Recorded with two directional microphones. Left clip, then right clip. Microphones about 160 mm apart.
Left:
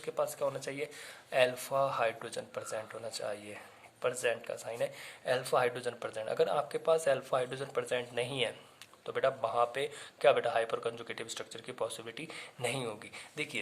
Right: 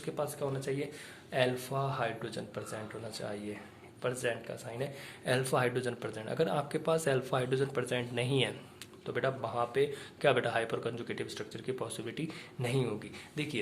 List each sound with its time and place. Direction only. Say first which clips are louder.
0.0 s speech: left 2 dB; 40° left (ahead or behind)
5.2 s speech: left 1 dB; 25° left (ahead or behind)